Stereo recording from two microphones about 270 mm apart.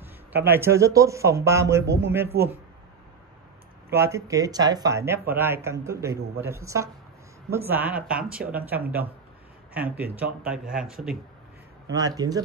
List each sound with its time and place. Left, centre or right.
0.3 s a man's voice: right
0.6 s speech: centre
2.3 s speech: right
3.9 s speech: centre
11.9 s speech: centre